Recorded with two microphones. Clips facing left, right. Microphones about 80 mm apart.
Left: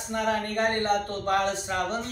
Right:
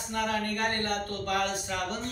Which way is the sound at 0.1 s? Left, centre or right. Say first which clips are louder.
Left 3 dB; left.